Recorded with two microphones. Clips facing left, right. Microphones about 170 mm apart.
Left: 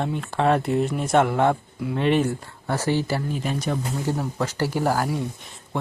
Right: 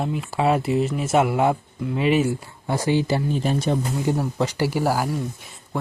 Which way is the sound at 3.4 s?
30° right (ahead or behind).